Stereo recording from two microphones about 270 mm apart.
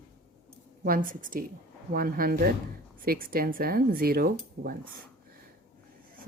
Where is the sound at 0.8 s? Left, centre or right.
Right.